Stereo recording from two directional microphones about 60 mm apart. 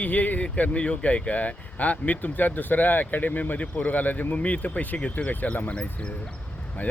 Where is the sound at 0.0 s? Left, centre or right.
Left.